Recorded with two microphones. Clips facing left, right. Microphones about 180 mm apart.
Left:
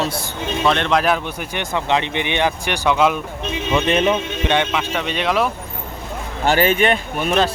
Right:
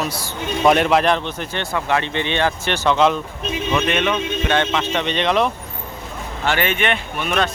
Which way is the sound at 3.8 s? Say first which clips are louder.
Left 3 dB; 30° left (ahead or behind).